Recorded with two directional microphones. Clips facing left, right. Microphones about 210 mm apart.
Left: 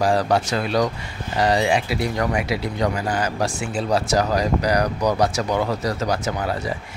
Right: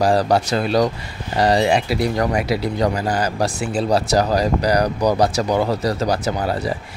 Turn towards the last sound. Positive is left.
turn(degrees=-35)  # may be behind; listen again after turning